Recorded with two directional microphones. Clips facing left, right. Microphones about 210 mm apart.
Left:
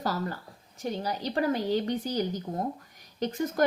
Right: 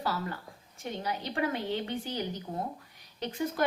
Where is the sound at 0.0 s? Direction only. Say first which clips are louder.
Left 3 dB; 40° left (ahead or behind).